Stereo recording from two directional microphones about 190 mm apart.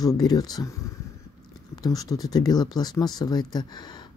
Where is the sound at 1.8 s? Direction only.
20° left (ahead or behind).